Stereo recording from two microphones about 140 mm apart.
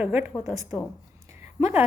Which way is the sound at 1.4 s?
15° right (ahead or behind).